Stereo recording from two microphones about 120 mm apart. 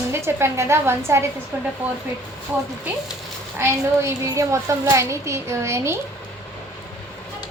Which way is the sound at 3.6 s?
25° right (ahead or behind).